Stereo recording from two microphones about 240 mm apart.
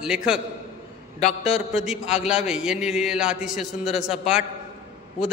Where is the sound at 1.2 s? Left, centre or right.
Left.